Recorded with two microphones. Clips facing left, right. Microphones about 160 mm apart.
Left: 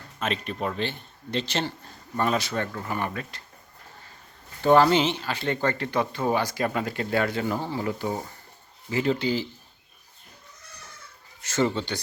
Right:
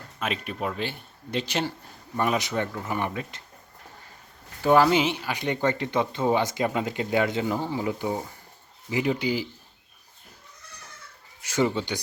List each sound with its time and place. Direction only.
0.2 s speech: 5° right (ahead or behind)
4.6 s speech: 5° right (ahead or behind)
11.4 s speech: 15° right (ahead or behind)